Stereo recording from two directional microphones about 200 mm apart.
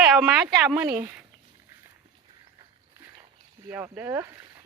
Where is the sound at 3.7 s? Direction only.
10° right (ahead or behind).